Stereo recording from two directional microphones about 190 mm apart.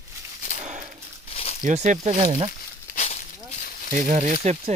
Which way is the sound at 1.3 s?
35° left (ahead or behind).